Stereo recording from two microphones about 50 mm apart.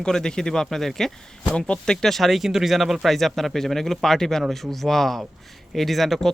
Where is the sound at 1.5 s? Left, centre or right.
Centre.